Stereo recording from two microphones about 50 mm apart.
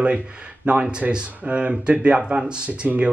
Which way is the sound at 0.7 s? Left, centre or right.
Right.